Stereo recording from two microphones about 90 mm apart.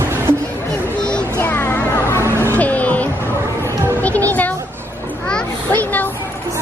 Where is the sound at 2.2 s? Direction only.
25° right (ahead or behind).